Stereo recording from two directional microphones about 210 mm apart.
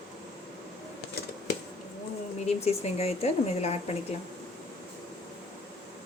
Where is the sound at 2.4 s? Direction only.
30° left (ahead or behind).